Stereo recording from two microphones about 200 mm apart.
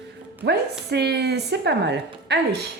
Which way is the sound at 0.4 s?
55° right (ahead or behind).